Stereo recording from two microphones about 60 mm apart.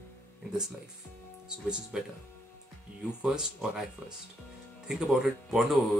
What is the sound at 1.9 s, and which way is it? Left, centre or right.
Speech, centre.